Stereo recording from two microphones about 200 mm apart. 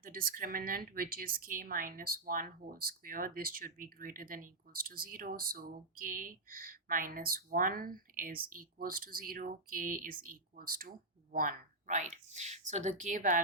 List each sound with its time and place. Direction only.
0.0 s a woman's voice: 45° right (ahead or behind)